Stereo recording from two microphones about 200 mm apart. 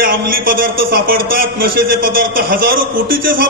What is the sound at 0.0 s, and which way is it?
A man's voice, 45° right (ahead or behind).